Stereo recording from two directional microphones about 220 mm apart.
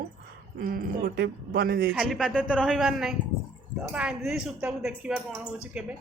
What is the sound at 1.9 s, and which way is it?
Speech, centre (ahead or behind).